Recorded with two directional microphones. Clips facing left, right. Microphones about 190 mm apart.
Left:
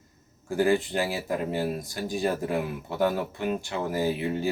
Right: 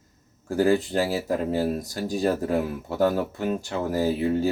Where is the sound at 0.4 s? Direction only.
40° right (ahead or behind).